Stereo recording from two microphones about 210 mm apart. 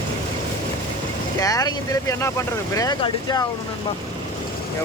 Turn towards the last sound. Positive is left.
turn(degrees=20)  # may be behind; listen again after turning